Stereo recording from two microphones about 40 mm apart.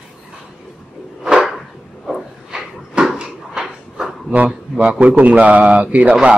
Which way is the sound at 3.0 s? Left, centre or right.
Right.